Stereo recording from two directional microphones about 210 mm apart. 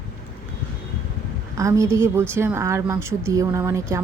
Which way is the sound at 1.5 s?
15° right (ahead or behind).